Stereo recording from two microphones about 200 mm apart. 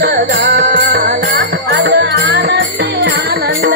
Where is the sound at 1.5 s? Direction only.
60° right (ahead or behind).